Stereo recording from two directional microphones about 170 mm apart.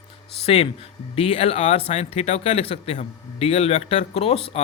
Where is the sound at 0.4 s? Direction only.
35° left (ahead or behind).